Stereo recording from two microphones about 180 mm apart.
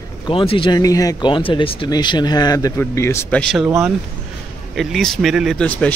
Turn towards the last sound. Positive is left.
turn(degrees=5)  # may be behind; listen again after turning